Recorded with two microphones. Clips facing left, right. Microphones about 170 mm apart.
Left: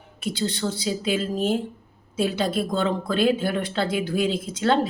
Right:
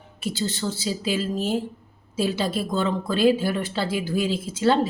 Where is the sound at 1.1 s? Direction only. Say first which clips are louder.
Left 1 dB; 55° left (ahead or behind).